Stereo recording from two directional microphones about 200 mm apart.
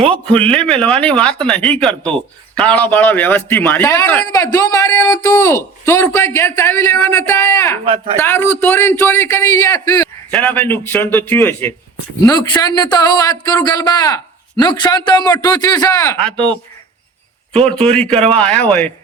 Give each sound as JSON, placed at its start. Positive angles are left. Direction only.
{"t": 0.1, "sound": "a man's voice", "side_deg": 5}
{"t": 7.9, "sound": "speech", "side_deg": -30}
{"t": 8.2, "sound": "a man's voice", "side_deg": 10}
{"t": 10.3, "sound": "a man's voice", "side_deg": 5}
{"t": 16.2, "sound": "speech", "side_deg": 5}